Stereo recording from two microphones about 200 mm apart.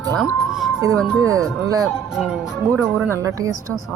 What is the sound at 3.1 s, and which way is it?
Speech, 15° right (ahead or behind).